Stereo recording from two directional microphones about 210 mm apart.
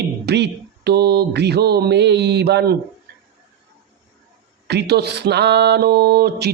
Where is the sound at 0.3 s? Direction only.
50° right (ahead or behind).